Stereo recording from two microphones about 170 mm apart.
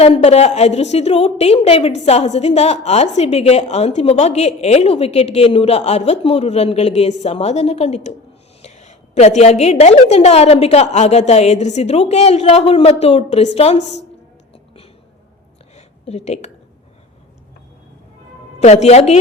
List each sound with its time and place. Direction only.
0.0 s a woman's voice: 40° left (ahead or behind)
15.7 s a sound: 40° left (ahead or behind)
18.6 s a woman's voice: 40° left (ahead or behind)